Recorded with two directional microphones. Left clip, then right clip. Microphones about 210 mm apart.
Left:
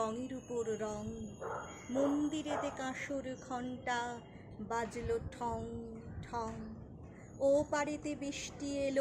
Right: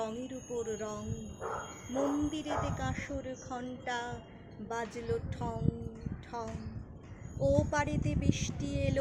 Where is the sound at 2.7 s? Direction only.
10° left (ahead or behind).